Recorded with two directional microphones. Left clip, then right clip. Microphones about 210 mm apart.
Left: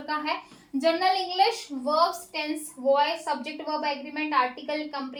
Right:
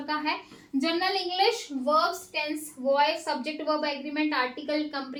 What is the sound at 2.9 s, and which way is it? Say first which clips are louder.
A woman's voice: left 1 dB; 10° left (ahead or behind).